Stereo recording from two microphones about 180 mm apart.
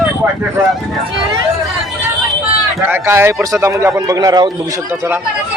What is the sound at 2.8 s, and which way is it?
Speech, 10° right (ahead or behind).